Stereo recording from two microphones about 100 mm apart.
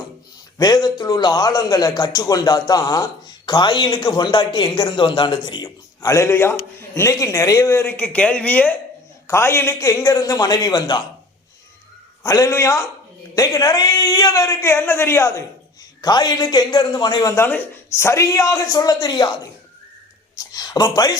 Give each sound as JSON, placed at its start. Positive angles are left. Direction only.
{"t": 0.6, "sound": "a man's voice", "side_deg": 45}
{"t": 9.2, "sound": "a man's voice", "side_deg": 25}
{"t": 9.9, "sound": "a man's voice", "side_deg": 40}
{"t": 12.2, "sound": "a man's voice", "side_deg": 35}
{"t": 16.0, "sound": "a man's voice", "side_deg": 45}
{"t": 17.2, "sound": "a man's voice", "side_deg": 25}